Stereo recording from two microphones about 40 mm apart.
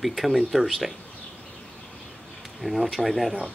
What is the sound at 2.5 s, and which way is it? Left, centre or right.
Speech, centre.